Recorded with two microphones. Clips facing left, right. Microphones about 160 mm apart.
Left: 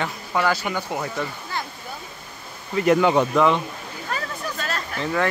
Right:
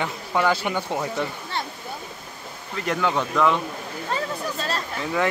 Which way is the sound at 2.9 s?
20° left (ahead or behind).